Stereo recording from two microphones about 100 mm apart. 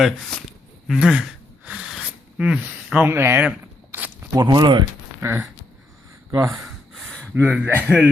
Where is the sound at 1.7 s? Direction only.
10° right (ahead or behind).